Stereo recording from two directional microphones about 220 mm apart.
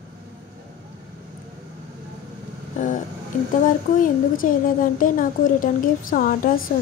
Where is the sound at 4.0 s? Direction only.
40° left (ahead or behind).